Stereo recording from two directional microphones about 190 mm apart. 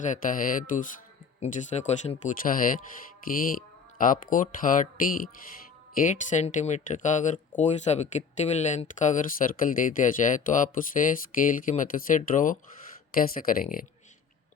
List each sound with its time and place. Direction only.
0.0 s speech: 45° left (ahead or behind)
3.9 s speech: 45° left (ahead or behind)